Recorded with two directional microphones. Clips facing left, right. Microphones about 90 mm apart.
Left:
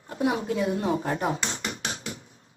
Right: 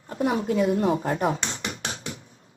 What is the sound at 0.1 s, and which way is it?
Speech, 40° right (ahead or behind).